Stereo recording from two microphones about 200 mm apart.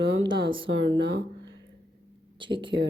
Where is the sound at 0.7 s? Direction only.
70° right (ahead or behind).